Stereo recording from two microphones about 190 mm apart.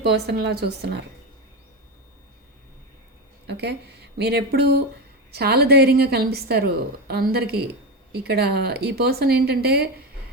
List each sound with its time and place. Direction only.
0.0 s speech: 60° right (ahead or behind)
3.4 s speech: 60° right (ahead or behind)